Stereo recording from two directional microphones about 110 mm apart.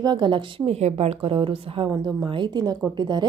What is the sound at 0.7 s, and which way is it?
A woman's voice, 75° right (ahead or behind).